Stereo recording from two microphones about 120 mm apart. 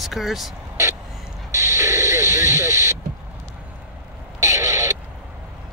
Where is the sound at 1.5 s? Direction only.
25° right (ahead or behind).